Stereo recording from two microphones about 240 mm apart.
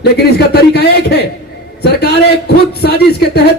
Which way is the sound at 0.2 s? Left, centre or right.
Left.